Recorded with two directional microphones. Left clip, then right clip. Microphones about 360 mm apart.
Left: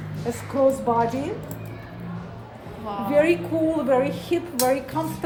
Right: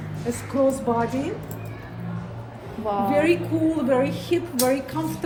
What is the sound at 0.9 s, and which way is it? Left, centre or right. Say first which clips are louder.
Speech: left 2 dB; centre.